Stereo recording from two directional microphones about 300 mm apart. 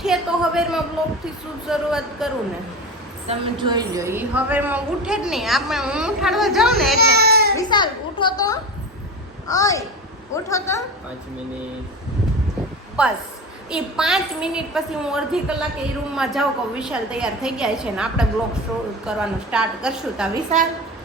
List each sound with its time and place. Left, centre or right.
0.0 s a sound: centre
1.0 s a woman's voice: centre
3.2 s a woman's voice: centre
7.0 s baby cry: right
7.5 s a woman's voice: centre
13.0 s a woman's voice: centre